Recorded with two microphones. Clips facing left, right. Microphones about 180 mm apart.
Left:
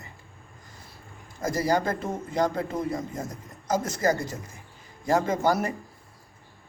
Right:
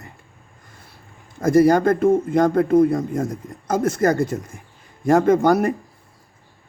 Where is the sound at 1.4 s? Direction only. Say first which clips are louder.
Right 11 dB; 55° right (ahead or behind).